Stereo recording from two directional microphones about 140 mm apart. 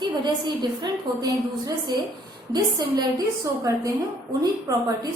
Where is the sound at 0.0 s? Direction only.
30° right (ahead or behind).